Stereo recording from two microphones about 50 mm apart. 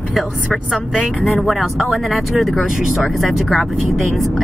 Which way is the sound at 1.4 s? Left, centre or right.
Centre.